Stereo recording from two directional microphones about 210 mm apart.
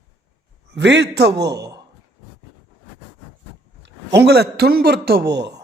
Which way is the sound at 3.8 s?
55° right (ahead or behind).